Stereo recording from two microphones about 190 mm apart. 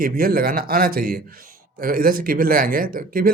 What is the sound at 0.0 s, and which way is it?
Speech, 50° right (ahead or behind).